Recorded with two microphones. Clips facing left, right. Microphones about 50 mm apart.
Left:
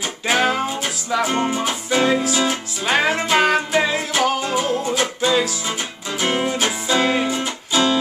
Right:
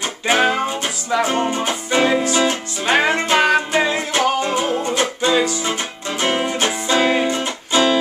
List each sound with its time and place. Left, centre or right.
0.3 s music: centre
1.9 s music: centre
2.2 s music: centre
7.7 s music: right